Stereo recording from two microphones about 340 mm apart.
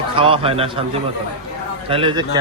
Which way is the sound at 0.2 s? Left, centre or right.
Centre.